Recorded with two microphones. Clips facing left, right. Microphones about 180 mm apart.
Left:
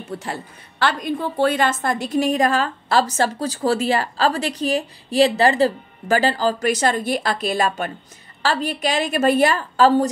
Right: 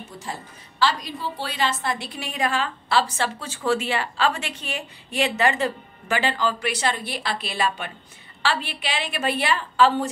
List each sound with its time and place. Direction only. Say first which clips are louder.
0.2 s a woman's voice: left 5 dB; 60° left (ahead or behind); by 10.0 s 40° left (ahead or behind)